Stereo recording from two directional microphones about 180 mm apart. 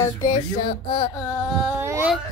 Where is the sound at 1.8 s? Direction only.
15° right (ahead or behind).